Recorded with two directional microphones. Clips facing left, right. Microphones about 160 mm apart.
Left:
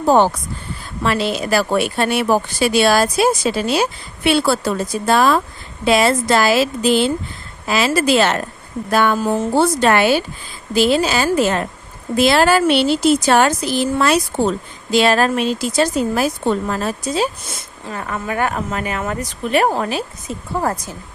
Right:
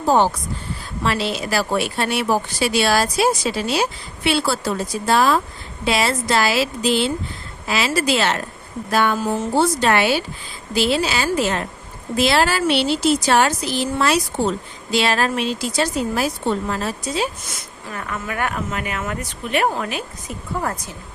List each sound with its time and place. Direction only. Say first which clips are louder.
1.0 s a woman's voice: left 3 dB; 50° left (ahead or behind)
17.5 s speech: left 3 dB; 30° left (ahead or behind)